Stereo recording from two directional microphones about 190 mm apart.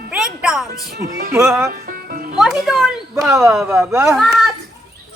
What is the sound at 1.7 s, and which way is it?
Music, 50° right (ahead or behind).